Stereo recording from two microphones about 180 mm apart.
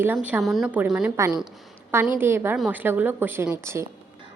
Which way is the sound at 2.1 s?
10° right (ahead or behind).